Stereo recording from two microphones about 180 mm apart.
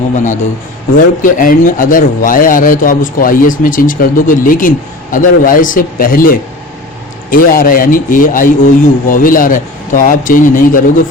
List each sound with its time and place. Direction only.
0.9 s speech: 50° left (ahead or behind)